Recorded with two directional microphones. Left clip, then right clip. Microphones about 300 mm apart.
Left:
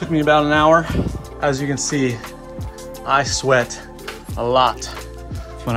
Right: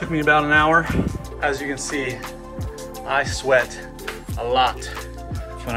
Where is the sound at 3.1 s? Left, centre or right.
Left.